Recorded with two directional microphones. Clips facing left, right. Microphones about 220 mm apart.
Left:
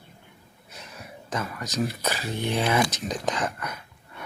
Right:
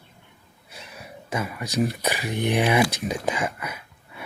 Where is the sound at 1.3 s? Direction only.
10° right (ahead or behind).